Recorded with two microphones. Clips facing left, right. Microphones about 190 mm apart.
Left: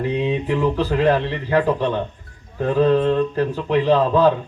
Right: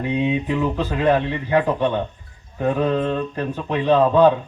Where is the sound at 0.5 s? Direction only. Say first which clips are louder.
Left 3 dB; 20° right (ahead or behind).